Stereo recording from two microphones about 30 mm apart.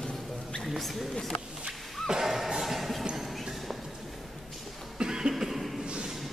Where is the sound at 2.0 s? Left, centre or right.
Centre.